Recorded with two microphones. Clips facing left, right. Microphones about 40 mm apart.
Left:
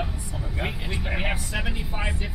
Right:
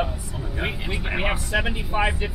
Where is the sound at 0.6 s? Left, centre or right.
Centre.